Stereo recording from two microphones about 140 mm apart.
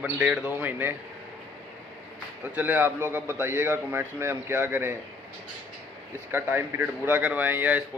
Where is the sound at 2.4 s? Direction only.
10° right (ahead or behind).